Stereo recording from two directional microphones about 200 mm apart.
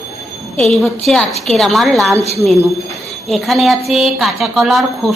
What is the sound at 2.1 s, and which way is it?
Speech, 30° left (ahead or behind).